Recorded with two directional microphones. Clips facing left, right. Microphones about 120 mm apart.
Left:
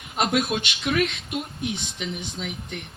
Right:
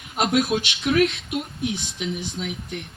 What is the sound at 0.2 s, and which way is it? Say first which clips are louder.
Speech: right 2 dB; centre (ahead or behind).